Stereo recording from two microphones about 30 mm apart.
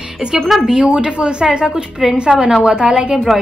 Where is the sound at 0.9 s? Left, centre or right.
Right.